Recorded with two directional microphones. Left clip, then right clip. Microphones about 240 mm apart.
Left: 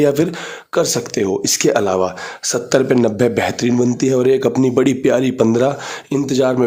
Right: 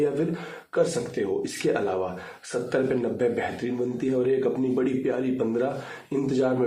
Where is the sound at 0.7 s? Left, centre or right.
Left.